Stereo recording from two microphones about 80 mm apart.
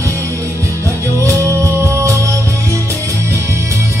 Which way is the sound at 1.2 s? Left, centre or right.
Right.